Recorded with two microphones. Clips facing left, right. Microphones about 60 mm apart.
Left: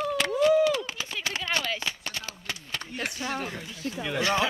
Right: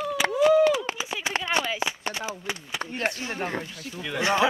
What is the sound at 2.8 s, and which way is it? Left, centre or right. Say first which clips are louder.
Speech: right 6 dB; right.